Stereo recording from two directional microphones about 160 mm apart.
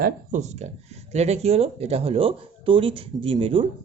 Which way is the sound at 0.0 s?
50° right (ahead or behind).